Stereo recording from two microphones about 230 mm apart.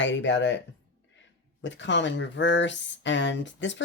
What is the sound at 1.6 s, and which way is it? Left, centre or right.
Speech, left.